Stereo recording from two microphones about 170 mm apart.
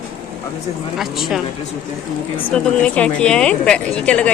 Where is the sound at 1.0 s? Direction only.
Centre (ahead or behind).